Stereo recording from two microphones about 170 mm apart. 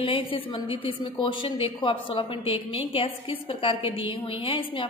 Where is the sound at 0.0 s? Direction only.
30° left (ahead or behind).